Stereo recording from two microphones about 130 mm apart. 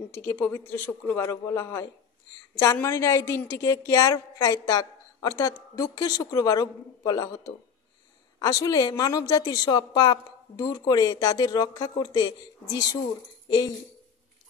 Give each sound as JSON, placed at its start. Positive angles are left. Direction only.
{"t": 0.1, "sound": "a woman's voice", "side_deg": 15}